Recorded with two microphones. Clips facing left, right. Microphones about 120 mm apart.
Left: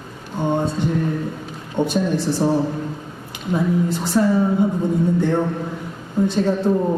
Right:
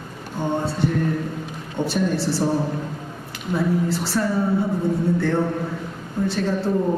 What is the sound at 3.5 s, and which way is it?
A man's voice, 20° left (ahead or behind).